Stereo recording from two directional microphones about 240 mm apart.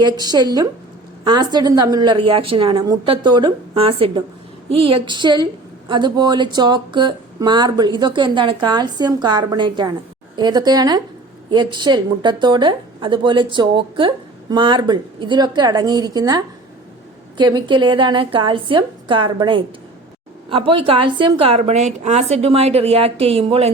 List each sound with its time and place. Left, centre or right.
0.0 s a woman's voice: centre